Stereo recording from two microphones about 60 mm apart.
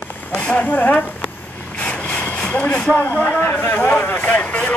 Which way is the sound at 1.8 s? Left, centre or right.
Left.